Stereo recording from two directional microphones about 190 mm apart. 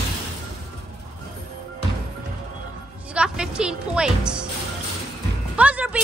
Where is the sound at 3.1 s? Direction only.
5° right (ahead or behind).